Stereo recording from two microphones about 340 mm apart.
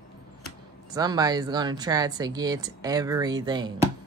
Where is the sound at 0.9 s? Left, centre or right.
Centre.